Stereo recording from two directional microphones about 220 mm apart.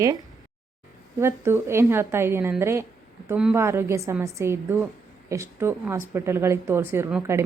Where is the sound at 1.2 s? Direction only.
10° right (ahead or behind).